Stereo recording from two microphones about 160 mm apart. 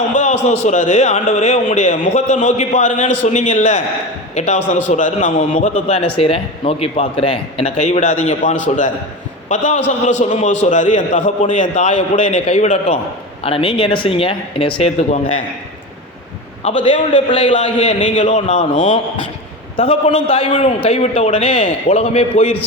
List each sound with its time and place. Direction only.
0.1 s a man's voice: 50° left (ahead or behind)
5.4 s a man's voice: 40° left (ahead or behind)
16.6 s a man's voice: 45° left (ahead or behind)
17.1 s a man's voice: 30° left (ahead or behind)
17.5 s a man's voice: 50° left (ahead or behind)